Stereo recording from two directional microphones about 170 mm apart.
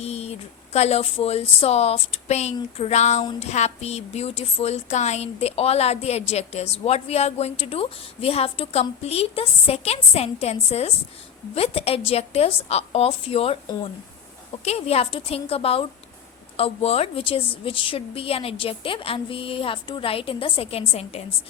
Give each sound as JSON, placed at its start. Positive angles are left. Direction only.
{"t": 0.0, "sound": "a woman's voice", "side_deg": 35}